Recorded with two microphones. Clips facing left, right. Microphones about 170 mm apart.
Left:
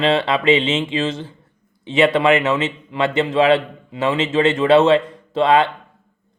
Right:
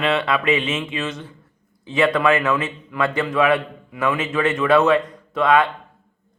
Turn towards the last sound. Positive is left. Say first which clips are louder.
# left 2 dB
turn(degrees=25)  # may be behind; listen again after turning